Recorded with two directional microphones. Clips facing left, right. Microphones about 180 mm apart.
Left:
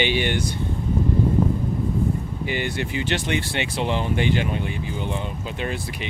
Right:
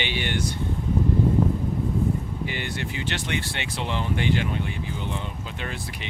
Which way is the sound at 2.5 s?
15° left (ahead or behind).